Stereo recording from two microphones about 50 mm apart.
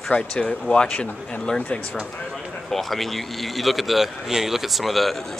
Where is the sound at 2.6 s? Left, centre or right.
Centre.